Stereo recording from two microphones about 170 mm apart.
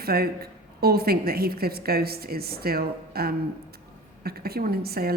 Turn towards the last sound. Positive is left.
turn(degrees=-65)  # may be behind; listen again after turning